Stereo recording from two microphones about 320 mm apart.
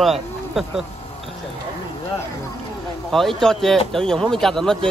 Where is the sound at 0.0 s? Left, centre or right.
Centre.